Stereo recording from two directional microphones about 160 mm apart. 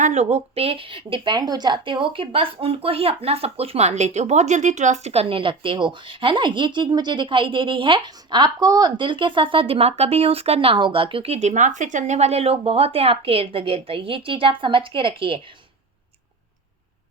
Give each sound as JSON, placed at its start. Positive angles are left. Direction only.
{"t": 0.0, "sound": "a woman's voice", "side_deg": -45}